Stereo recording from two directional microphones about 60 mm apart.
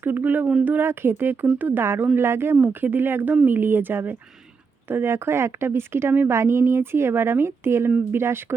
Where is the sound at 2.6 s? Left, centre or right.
Right.